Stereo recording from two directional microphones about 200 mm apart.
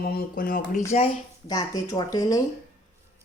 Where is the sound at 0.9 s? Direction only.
30° left (ahead or behind).